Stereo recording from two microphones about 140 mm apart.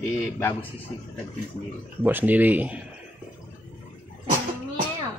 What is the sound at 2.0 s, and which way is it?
Speech, 15° right (ahead or behind).